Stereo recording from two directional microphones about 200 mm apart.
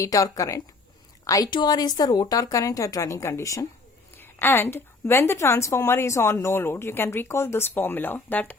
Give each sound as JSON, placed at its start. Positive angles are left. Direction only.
{"t": 0.0, "sound": "a woman's voice", "side_deg": 15}